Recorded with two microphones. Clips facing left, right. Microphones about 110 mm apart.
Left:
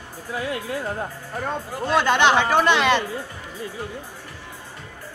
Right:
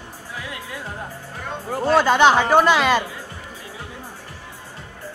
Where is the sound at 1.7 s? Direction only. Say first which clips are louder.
Right 4 dB; 40° right (ahead or behind).